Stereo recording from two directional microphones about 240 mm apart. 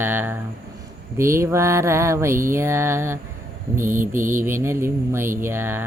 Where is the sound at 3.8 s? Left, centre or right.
Right.